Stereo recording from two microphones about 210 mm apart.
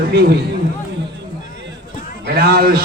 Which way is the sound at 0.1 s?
50° right (ahead or behind).